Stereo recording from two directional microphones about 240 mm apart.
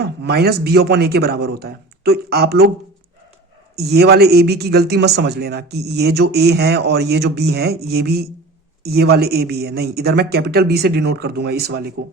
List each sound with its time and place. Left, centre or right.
0.0 s speech: right
3.8 s speech: right